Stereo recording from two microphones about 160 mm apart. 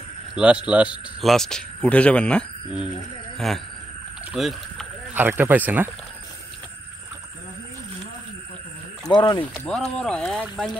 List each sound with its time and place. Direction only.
0.3 s a man's voice: 5° right (ahead or behind)
1.3 s speech: 5° left (ahead or behind)
5.1 s speech: 15° right (ahead or behind)
9.0 s speech: 30° left (ahead or behind)
9.4 s speech: 10° left (ahead or behind)